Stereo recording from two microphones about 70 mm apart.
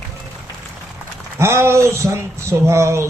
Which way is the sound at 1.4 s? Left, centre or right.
Right.